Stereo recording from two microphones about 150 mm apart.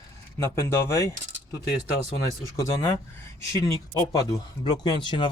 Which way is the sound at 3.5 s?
20° left (ahead or behind).